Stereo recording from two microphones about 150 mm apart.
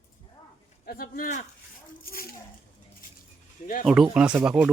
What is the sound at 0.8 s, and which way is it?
Speech, 75° left (ahead or behind).